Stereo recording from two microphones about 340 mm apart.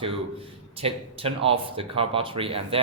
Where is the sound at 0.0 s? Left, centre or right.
Centre.